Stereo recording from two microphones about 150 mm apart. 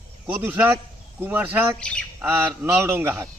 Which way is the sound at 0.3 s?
10° right (ahead or behind).